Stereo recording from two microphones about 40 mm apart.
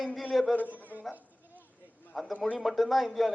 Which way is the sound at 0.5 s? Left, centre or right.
Left.